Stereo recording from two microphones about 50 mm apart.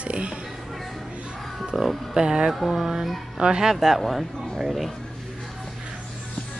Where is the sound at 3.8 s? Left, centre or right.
Centre.